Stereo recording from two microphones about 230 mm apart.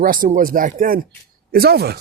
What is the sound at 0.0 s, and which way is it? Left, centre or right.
Speech, right.